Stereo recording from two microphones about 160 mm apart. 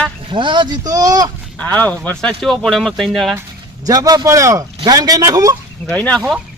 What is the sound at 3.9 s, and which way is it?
Speech, 25° right (ahead or behind).